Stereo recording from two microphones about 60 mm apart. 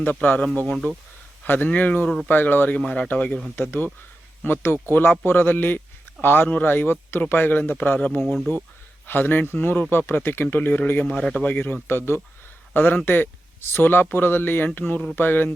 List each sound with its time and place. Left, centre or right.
0.0 s speech: left
1.5 s speech: left
2.0 s speech: centre
2.3 s speech: left
2.7 s speech: centre
3.5 s speech: left
8.5 s speech: left
11.0 s speech: centre
11.3 s speech: left
12.7 s speech: left